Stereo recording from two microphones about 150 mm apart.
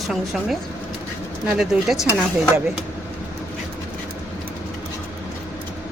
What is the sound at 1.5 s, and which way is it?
Speech, 5° right (ahead or behind).